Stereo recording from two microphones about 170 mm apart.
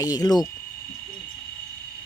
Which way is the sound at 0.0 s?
20° left (ahead or behind).